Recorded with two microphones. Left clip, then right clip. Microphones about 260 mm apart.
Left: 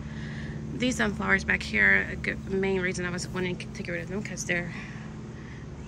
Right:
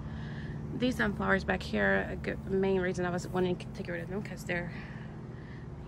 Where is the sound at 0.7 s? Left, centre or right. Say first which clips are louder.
Left 3 dB; centre.